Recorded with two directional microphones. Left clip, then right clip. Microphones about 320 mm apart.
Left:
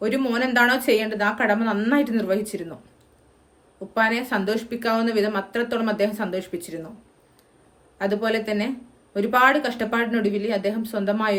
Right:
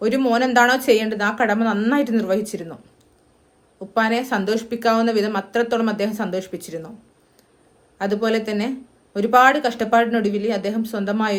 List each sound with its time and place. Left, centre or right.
0.0 s speech: centre
3.9 s speech: centre
7.9 s speech: centre